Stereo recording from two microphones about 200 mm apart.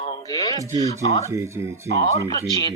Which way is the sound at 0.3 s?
15° left (ahead or behind).